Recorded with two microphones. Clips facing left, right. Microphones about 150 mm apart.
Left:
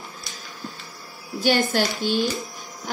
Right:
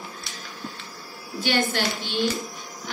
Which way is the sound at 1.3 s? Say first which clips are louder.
Left 4 dB; 45° left (ahead or behind).